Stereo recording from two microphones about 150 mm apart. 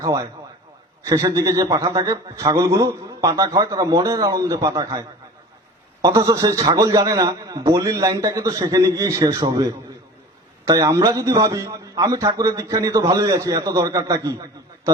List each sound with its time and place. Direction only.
0.0 s a man's voice: 25° right (ahead or behind)